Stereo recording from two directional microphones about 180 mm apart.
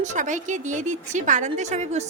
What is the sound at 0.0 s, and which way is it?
A woman's voice, 40° right (ahead or behind).